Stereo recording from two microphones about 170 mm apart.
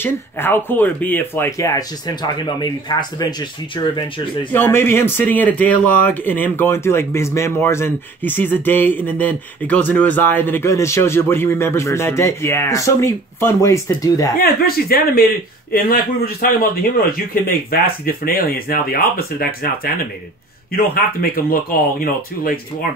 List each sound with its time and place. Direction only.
0.0 s speech: 10° left (ahead or behind)
4.5 s speech: 10° left (ahead or behind)
14.4 s a man's voice: 65° left (ahead or behind)